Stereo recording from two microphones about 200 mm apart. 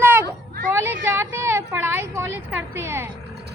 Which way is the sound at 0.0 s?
10° right (ahead or behind).